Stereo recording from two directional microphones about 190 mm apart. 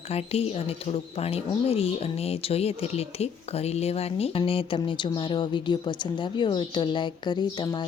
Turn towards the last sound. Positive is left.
turn(degrees=25)  # may be behind; listen again after turning